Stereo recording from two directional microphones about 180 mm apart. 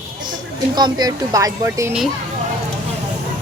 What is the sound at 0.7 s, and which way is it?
Speech, 25° right (ahead or behind).